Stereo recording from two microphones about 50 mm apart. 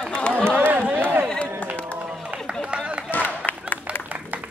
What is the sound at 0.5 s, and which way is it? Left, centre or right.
Run, right.